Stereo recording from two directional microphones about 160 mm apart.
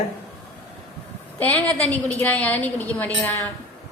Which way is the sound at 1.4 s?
10° left (ahead or behind).